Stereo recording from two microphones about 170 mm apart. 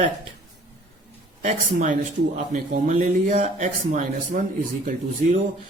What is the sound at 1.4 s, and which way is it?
Speech, 50° right (ahead or behind).